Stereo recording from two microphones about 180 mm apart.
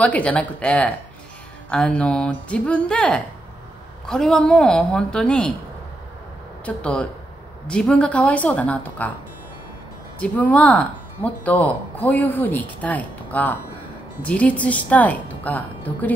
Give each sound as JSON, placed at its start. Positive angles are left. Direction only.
{"t": 0.0, "sound": "a woman's voice", "side_deg": 10}
{"t": 6.6, "sound": "a woman's voice", "side_deg": 5}
{"t": 10.1, "sound": "speech", "side_deg": 10}